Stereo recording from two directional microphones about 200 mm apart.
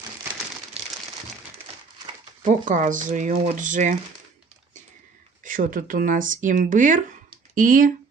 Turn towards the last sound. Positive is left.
turn(degrees=-45)  # may be behind; listen again after turning